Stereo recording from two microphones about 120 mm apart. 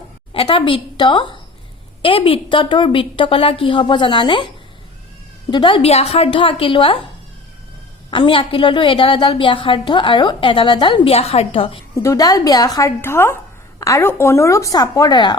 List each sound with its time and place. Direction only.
0.3 s a woman's voice: 50° left (ahead or behind)
5.9 s a woman's voice: 60° left (ahead or behind)
8.1 s a woman's voice: 45° left (ahead or behind)
11.9 s a woman's voice: 30° left (ahead or behind)
13.0 s a woman's voice: 20° left (ahead or behind); by 15.4 s 35° left (ahead or behind)